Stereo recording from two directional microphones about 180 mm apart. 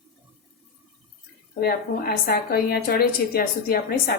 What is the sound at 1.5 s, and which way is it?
A woman's voice, 60° left (ahead or behind).